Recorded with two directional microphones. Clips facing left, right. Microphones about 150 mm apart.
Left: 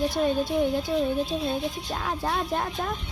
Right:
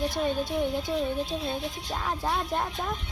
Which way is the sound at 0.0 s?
10° left (ahead or behind).